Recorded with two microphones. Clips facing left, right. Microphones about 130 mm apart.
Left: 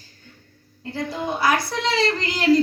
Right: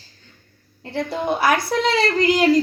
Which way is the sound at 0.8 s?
65° right (ahead or behind).